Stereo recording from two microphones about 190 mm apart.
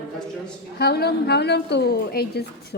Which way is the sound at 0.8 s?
55° left (ahead or behind).